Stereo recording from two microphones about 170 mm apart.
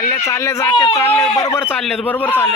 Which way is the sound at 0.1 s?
15° left (ahead or behind).